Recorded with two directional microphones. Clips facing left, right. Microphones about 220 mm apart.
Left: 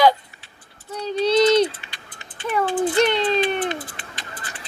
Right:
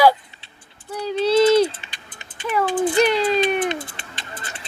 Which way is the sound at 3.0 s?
25° left (ahead or behind).